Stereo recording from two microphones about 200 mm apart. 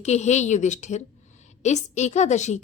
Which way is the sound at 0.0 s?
35° left (ahead or behind).